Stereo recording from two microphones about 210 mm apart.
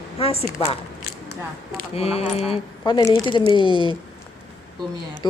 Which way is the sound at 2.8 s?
15° left (ahead or behind).